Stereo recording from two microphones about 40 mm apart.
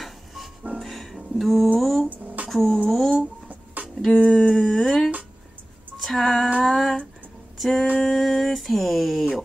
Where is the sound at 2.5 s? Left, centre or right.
Centre.